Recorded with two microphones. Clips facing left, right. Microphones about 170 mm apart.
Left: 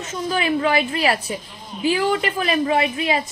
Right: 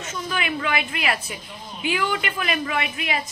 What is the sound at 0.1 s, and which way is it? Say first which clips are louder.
A woman's voice: left 6 dB; 35° left (ahead or behind).